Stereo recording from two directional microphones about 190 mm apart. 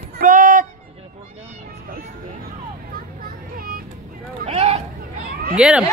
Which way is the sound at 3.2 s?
50° right (ahead or behind).